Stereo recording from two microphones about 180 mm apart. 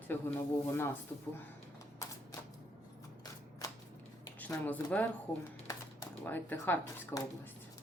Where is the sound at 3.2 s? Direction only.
20° left (ahead or behind).